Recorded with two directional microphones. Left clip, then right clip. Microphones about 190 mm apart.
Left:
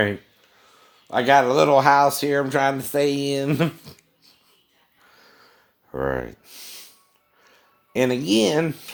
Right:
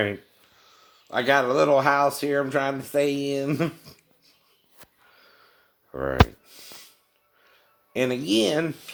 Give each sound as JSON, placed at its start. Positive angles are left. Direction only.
{"t": 1.0, "sound": "speech", "side_deg": 40}
{"t": 5.1, "sound": "a sound", "side_deg": 40}
{"t": 7.4, "sound": "speech", "side_deg": 40}